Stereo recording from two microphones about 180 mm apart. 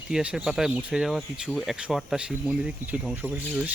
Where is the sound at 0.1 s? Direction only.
5° right (ahead or behind).